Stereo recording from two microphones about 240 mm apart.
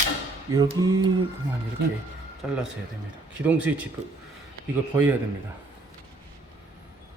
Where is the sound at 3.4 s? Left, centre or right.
Centre.